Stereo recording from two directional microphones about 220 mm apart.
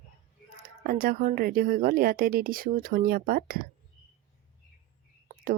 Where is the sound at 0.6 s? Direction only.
40° right (ahead or behind).